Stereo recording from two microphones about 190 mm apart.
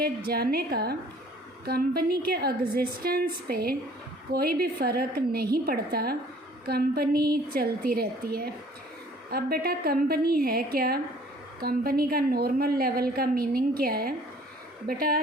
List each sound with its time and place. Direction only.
0.0 s a woman's voice: 55° right (ahead or behind)